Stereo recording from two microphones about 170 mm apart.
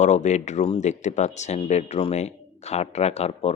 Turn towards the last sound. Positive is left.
turn(degrees=40)  # may be behind; listen again after turning